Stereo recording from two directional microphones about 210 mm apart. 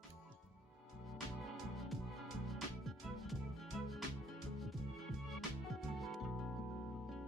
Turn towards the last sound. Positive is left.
turn(degrees=0)  # may be behind; listen again after turning